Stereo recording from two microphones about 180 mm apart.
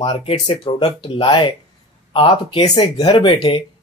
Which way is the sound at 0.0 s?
30° left (ahead or behind).